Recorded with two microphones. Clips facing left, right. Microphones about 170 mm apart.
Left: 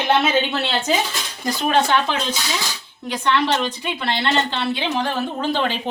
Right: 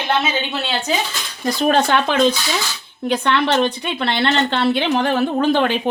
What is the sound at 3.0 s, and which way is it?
A woman's voice, 65° right (ahead or behind).